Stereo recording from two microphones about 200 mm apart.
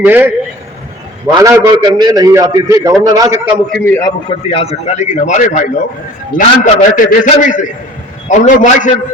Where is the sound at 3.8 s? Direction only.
10° left (ahead or behind).